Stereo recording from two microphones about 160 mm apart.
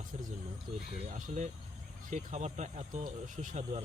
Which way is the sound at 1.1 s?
50° right (ahead or behind).